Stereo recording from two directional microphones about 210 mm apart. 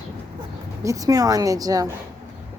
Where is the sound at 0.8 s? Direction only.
15° right (ahead or behind).